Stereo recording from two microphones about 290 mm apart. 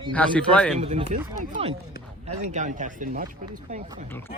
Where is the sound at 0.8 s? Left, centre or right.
Right.